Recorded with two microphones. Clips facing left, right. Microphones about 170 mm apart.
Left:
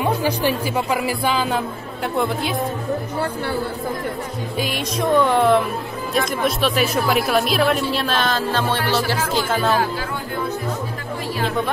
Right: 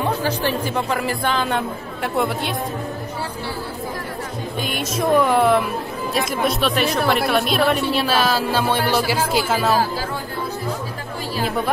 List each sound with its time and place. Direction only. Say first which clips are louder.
0.0 s speech: left 2 dB; 10° left (ahead or behind)
4.6 s speech: left 1 dB; centre (ahead or behind)